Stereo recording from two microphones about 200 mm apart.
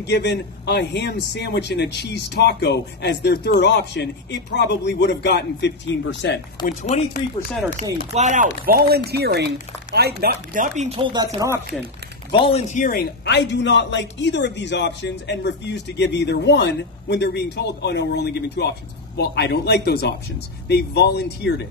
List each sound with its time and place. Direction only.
0.0 s a man's voice: 55° left (ahead or behind)
6.8 s speech: 35° left (ahead or behind)
8.1 s speech: 35° right (ahead or behind)
8.6 s speech: 50° right (ahead or behind)
10.9 s speech: 25° right (ahead or behind)
12.4 s a man's voice: 35° left (ahead or behind); by 21.5 s 55° left (ahead or behind)